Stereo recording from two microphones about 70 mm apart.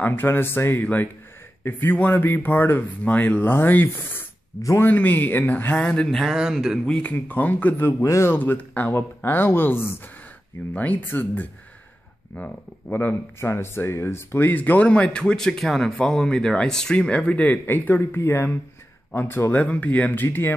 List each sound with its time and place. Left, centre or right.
0.0 s speech: left
4.6 s speech: left
4.8 s speech: left
5.8 s speech: centre
6.3 s speech: centre
6.9 s speech: centre
8.0 s speech: left
8.3 s speech: left
10.7 s speech: left
12.9 s speech: left